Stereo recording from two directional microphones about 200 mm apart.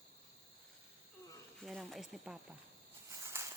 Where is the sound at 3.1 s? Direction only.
15° right (ahead or behind).